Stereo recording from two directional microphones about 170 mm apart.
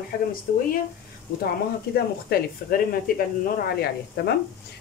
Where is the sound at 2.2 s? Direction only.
60° left (ahead or behind).